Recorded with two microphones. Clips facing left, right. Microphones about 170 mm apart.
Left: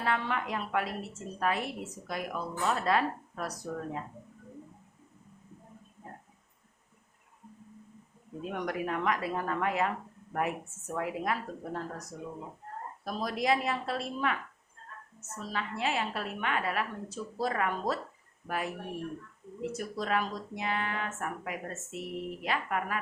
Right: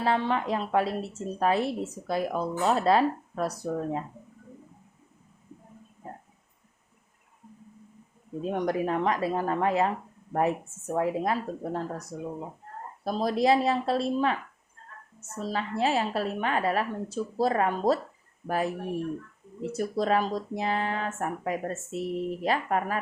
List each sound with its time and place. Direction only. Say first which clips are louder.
0.0 s speech: right 6 dB; 30° right (ahead or behind)
8.4 s speech: right 7 dB; 30° right (ahead or behind)
15.4 s speech: right 7 dB; 35° right (ahead or behind)
19.7 s speech: right 7 dB; 35° right (ahead or behind)